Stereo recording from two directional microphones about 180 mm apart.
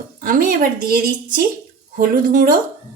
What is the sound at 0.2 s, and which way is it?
A woman's voice, 50° right (ahead or behind).